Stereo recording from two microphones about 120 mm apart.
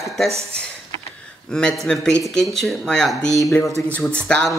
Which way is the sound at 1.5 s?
5° left (ahead or behind).